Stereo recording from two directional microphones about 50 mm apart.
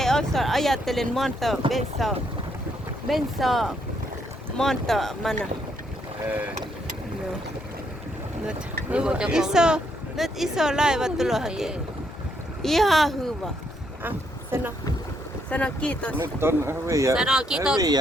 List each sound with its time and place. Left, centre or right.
0.0 s speech: centre
8.4 s speech: right
10.2 s speech: centre
12.6 s speech: centre
15.4 s speech: left
16.1 s speech: right
17.2 s speech: centre